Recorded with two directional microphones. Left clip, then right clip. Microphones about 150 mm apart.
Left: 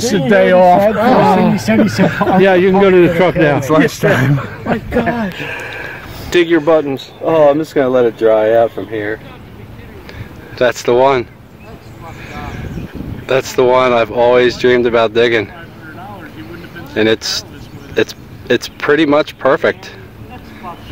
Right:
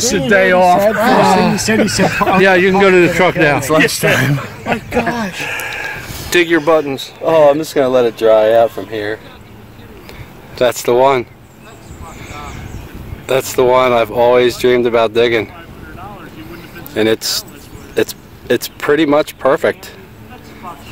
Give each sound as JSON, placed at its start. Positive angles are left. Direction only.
{"t": 0.3, "sound": "speech", "side_deg": 75}
{"t": 1.2, "sound": "a man's voice", "side_deg": -5}
{"t": 1.7, "sound": "speech", "side_deg": 40}
{"t": 2.4, "sound": "a man's voice", "side_deg": -5}
{"t": 4.7, "sound": "speech", "side_deg": 10}
{"t": 5.4, "sound": "speech", "side_deg": 55}
{"t": 6.3, "sound": "a man's voice", "side_deg": -5}
{"t": 10.6, "sound": "speech", "side_deg": -15}
{"t": 13.3, "sound": "speech", "side_deg": -15}
{"t": 16.9, "sound": "speech", "side_deg": -15}